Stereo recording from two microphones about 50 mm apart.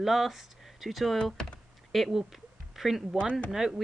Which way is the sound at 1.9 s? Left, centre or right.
Centre.